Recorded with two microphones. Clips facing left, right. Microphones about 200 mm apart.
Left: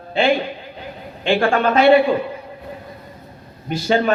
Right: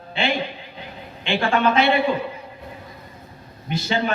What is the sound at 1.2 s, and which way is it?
Speech, 45° left (ahead or behind).